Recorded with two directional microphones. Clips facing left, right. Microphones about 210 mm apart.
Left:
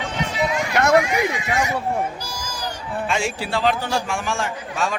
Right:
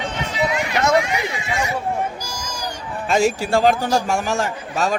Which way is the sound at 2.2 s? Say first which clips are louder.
Right 1 dB; 15° right (ahead or behind).